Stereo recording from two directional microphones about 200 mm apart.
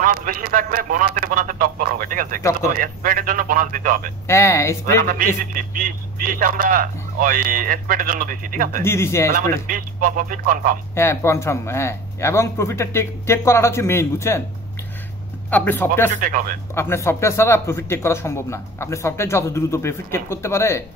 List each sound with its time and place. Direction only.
0.0 s speech: 45° right (ahead or behind)
4.3 s a man's voice: 15° left (ahead or behind)
5.0 s speech: 45° right (ahead or behind)
8.8 s a man's voice: 15° left (ahead or behind)
9.3 s speech: 45° right (ahead or behind)
11.0 s a man's voice: 15° left (ahead or behind)
15.5 s a man's voice: 10° left (ahead or behind)
16.1 s speech: 40° right (ahead or behind)
16.7 s a man's voice: 10° left (ahead or behind)